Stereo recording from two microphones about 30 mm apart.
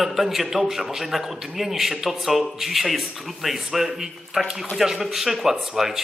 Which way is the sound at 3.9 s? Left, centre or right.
Centre.